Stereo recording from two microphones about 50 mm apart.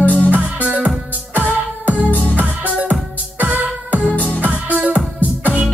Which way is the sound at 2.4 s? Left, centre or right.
Right.